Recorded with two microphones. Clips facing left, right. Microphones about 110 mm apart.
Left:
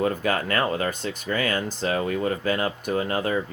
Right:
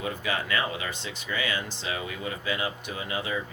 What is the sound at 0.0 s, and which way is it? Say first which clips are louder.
Speech: left 7 dB; 45° left (ahead or behind).